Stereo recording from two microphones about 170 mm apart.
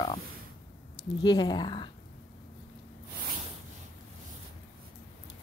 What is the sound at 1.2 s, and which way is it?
Speech, 25° left (ahead or behind).